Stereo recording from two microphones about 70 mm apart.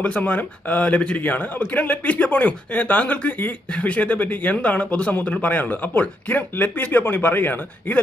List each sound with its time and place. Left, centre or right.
0.0 s speech: left